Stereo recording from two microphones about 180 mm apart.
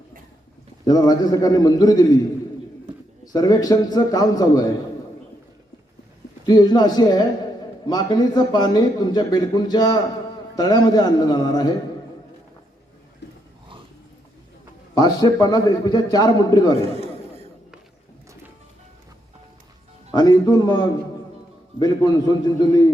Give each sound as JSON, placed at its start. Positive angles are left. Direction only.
{"t": 0.9, "sound": "speech", "side_deg": 20}
{"t": 3.3, "sound": "speech", "side_deg": 20}
{"t": 6.4, "sound": "speech", "side_deg": 20}
{"t": 14.9, "sound": "speech", "side_deg": 20}
{"t": 16.8, "sound": "chatter", "side_deg": -35}
{"t": 20.1, "sound": "speech", "side_deg": 20}